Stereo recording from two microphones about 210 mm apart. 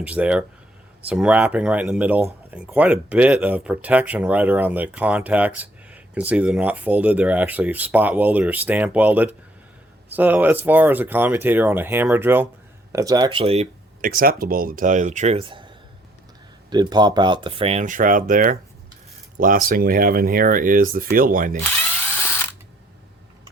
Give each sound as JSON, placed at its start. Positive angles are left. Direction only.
{"t": 0.0, "sound": "speech", "side_deg": -5}
{"t": 14.0, "sound": "speech", "side_deg": -45}